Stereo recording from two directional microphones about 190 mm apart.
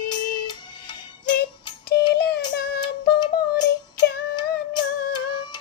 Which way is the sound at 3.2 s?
20° left (ahead or behind).